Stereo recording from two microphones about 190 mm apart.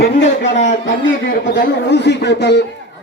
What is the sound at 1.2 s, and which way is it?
Speech, 70° left (ahead or behind).